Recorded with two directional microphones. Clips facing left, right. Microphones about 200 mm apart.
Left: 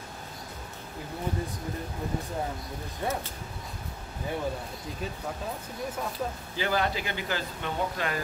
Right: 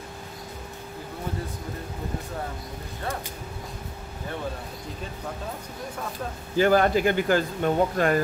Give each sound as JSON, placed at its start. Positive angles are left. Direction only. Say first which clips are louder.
{"t": 6.5, "sound": "speech", "louder": "right 10 dB", "side_deg": -50}